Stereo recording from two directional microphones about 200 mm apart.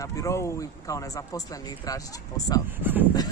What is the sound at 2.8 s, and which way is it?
Speech, 10° right (ahead or behind).